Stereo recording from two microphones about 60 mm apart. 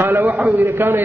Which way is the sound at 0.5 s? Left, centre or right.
Right.